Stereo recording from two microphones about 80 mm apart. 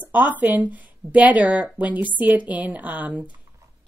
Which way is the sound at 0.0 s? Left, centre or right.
Right.